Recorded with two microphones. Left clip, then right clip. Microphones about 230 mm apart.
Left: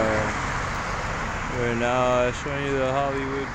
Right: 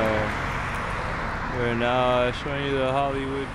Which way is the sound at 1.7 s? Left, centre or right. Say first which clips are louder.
Even; centre.